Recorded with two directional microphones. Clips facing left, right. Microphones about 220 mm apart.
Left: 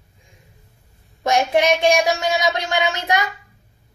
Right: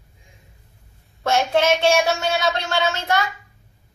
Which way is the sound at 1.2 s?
15° left (ahead or behind).